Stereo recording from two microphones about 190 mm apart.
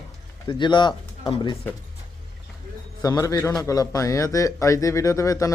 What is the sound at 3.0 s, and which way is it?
Speech, 20° left (ahead or behind).